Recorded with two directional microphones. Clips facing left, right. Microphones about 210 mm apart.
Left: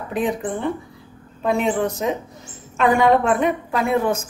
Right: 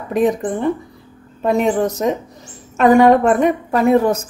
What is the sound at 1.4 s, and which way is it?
A woman's voice, 40° right (ahead or behind).